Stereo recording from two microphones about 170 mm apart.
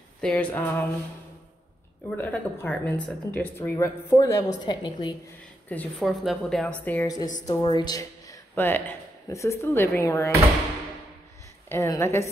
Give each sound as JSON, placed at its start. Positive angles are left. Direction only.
{"t": 0.2, "sound": "a woman's voice", "side_deg": 5}
{"t": 2.0, "sound": "a woman's voice", "side_deg": 10}
{"t": 5.7, "sound": "a woman's voice", "side_deg": 5}
{"t": 7.4, "sound": "speech", "side_deg": 25}
{"t": 11.7, "sound": "a woman's voice", "side_deg": 15}